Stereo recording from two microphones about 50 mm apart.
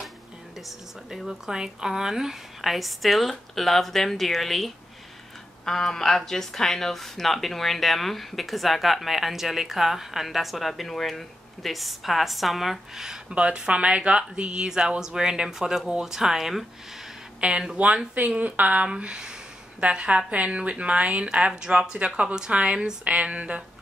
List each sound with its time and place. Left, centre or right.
0.6 s speech: centre
13.3 s speech: centre
17.4 s speech: right
18.4 s a woman's voice: right
18.9 s speech: centre